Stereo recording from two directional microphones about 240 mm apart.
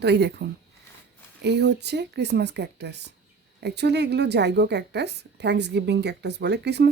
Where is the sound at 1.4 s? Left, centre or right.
Right.